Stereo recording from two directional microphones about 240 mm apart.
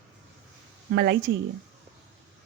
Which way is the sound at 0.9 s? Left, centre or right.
Right.